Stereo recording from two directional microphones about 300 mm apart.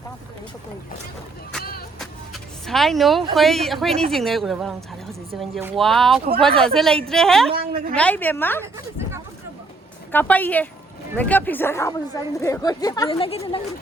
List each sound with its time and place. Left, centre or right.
2.0 s speech: centre
7.5 s a woman's voice: right
7.9 s speech: centre
8.6 s a sound: centre
10.1 s speech: centre